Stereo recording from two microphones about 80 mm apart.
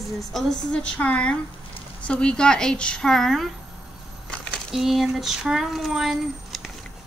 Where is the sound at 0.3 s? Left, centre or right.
Centre.